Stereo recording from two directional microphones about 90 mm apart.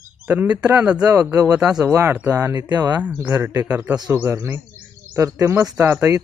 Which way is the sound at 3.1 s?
25° right (ahead or behind).